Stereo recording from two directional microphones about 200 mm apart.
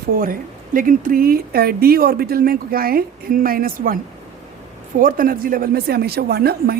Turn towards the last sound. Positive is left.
turn(degrees=-50)  # may be behind; listen again after turning